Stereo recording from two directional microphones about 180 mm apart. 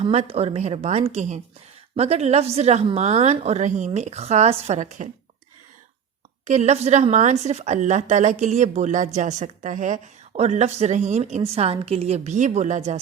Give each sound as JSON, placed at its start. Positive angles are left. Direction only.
{"t": 0.0, "sound": "a woman's voice", "side_deg": -35}
{"t": 6.4, "sound": "a woman's voice", "side_deg": -40}